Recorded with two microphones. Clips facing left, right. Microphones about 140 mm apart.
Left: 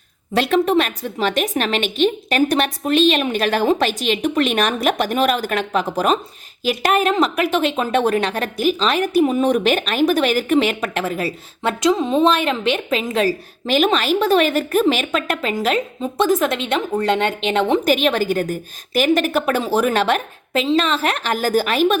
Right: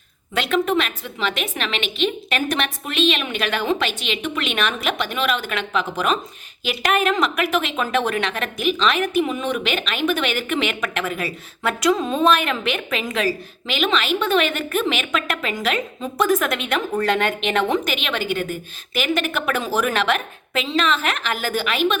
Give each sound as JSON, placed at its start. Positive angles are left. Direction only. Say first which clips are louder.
{"t": 0.3, "sound": "a woman's voice", "louder": "left 4 dB", "side_deg": 35}